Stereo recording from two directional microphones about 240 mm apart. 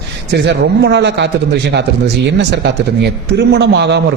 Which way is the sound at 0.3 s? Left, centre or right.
Right.